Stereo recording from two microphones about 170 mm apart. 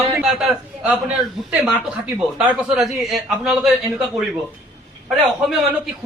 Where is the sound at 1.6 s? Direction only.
5° right (ahead or behind).